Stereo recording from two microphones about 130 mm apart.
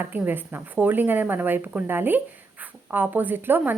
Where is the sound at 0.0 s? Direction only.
15° right (ahead or behind).